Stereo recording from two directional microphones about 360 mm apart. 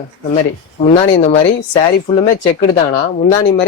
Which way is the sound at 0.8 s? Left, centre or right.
Centre.